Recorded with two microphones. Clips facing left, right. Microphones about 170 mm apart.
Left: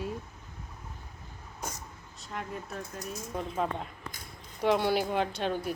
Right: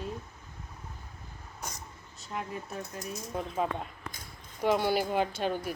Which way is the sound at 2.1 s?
Centre (ahead or behind).